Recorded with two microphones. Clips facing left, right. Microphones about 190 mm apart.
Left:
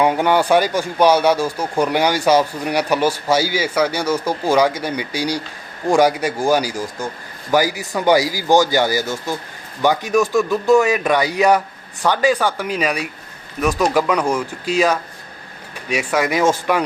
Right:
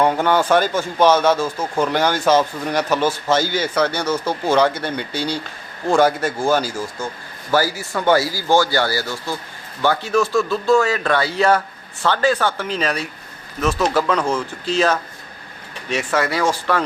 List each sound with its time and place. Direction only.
0.0 s speech: 10° left (ahead or behind)